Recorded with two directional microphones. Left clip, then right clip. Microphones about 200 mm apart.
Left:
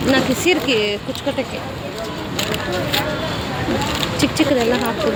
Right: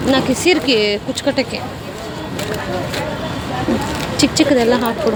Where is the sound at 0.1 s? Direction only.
15° right (ahead or behind).